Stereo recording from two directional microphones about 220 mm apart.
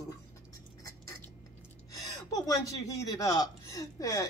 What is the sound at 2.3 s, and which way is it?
Speech, 15° left (ahead or behind).